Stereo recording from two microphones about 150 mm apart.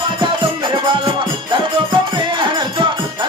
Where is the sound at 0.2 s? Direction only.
30° right (ahead or behind).